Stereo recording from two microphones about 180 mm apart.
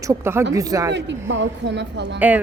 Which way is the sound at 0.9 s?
80° right.